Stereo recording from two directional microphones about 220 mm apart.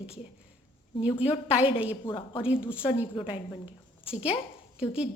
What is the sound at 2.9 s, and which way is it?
Speech, 30° left (ahead or behind).